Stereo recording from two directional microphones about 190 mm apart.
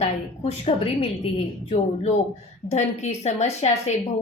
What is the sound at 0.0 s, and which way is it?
A woman's voice, 35° left (ahead or behind).